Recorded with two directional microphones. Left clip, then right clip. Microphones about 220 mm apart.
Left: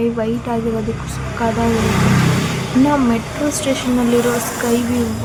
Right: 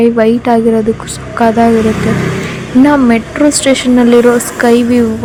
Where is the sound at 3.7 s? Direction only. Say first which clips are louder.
Right 8 dB; 25° right (ahead or behind).